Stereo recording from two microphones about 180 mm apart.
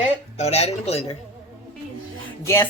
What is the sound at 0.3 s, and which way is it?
Speech, 35° left (ahead or behind).